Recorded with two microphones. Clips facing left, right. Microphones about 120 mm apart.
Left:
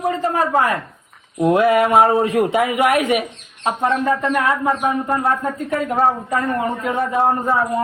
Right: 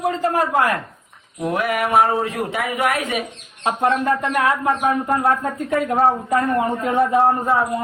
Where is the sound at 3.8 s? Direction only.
Centre (ahead or behind).